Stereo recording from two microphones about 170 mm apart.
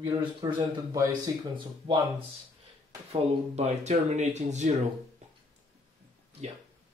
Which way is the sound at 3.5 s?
40° right (ahead or behind).